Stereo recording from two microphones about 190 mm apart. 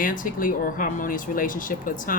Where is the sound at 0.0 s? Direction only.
45° left (ahead or behind).